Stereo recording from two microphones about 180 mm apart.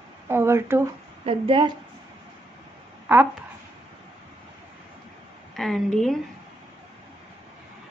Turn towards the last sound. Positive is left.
turn(degrees=0)  # may be behind; listen again after turning